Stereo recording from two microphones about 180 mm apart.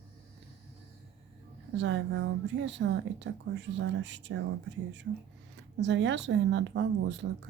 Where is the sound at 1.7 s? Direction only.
85° right.